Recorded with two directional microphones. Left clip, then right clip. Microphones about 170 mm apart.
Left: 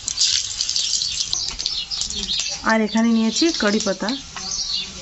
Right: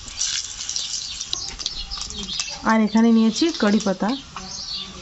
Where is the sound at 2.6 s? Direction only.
60° right (ahead or behind).